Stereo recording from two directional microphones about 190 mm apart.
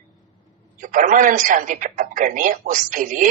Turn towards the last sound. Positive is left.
turn(degrees=-45)  # may be behind; listen again after turning